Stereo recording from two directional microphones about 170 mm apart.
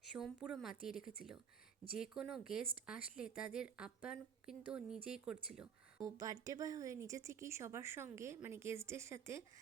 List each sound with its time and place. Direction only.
0.1 s a woman's voice: 5° right (ahead or behind)
6.0 s speech: 20° right (ahead or behind)